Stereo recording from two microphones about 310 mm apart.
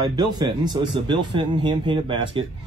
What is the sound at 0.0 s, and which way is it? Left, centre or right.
A man's voice, centre.